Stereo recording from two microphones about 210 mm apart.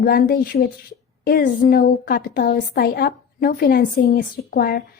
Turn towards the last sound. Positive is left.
turn(degrees=45)  # may be behind; listen again after turning